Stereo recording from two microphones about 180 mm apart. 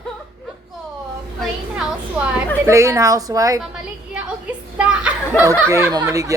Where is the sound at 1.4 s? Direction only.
5° right (ahead or behind).